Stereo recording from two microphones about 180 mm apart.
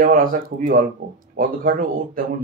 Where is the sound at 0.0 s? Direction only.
50° right (ahead or behind).